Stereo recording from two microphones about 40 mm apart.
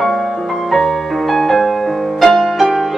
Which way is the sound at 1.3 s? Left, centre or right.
Centre.